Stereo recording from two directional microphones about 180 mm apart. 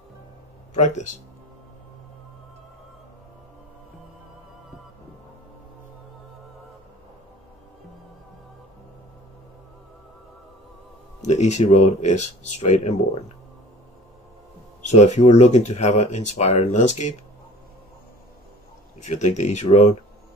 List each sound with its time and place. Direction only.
0.7 s speech: 40° left (ahead or behind)
11.2 s speech: 40° left (ahead or behind)
14.8 s speech: 40° left (ahead or behind)
18.9 s speech: 40° left (ahead or behind)